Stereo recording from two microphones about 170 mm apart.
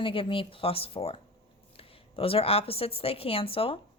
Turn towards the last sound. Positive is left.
turn(degrees=35)  # may be behind; listen again after turning